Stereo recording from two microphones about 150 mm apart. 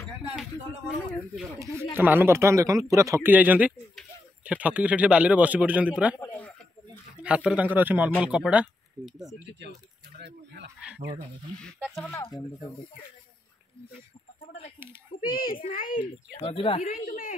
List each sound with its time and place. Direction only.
0.9 s speech: 5° left (ahead or behind)
2.0 s speech: 15° right (ahead or behind)
6.1 s a man's voice: 15° left (ahead or behind)
7.2 s speech: 5° right (ahead or behind)
10.1 s a sound: 90° right
11.8 s speech: centre (ahead or behind)
15.1 s a child's voice: 70° left (ahead or behind)
16.5 s a woman's voice: 40° left (ahead or behind)
16.8 s a woman's voice: 65° left (ahead or behind)